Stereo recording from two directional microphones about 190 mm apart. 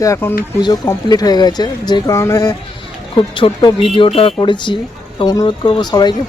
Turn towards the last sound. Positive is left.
turn(degrees=20)  # may be behind; listen again after turning